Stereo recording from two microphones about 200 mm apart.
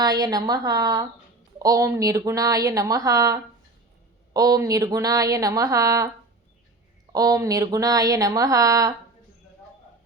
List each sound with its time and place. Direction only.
0.0 s a woman's voice: 20° right (ahead or behind)
7.1 s a woman's voice: 20° right (ahead or behind)